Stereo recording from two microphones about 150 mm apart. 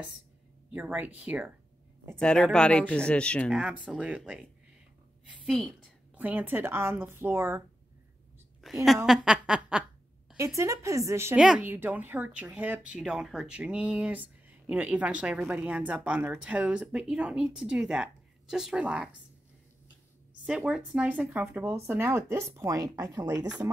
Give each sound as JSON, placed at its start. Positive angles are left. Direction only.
{"t": 0.7, "sound": "speech", "side_deg": -10}
{"t": 2.1, "sound": "speech", "side_deg": 5}
{"t": 3.8, "sound": "a woman's voice", "side_deg": -10}
{"t": 6.1, "sound": "speech", "side_deg": -10}
{"t": 8.5, "sound": "a woman's voice", "side_deg": 0}
{"t": 10.3, "sound": "a woman's voice", "side_deg": -20}
{"t": 11.3, "sound": "speech", "side_deg": -5}
{"t": 20.4, "sound": "speech", "side_deg": -5}